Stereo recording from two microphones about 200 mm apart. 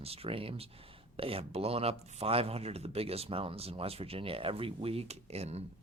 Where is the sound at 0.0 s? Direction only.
30° right (ahead or behind).